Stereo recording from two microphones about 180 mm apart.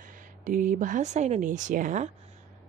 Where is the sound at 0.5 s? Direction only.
45° right (ahead or behind).